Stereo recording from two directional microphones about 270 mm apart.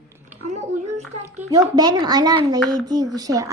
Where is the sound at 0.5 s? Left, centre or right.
Right.